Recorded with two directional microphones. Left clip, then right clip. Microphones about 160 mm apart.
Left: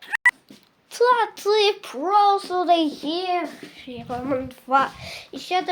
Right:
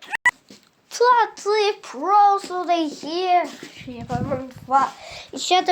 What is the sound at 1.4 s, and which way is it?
Speech, 25° left (ahead or behind).